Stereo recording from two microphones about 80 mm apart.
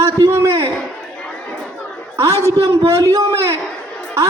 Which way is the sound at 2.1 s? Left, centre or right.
Right.